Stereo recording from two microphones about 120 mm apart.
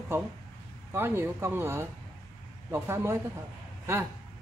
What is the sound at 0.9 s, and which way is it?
Speech, 20° right (ahead or behind).